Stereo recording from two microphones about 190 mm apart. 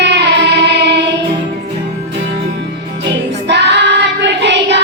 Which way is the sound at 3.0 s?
65° right (ahead or behind).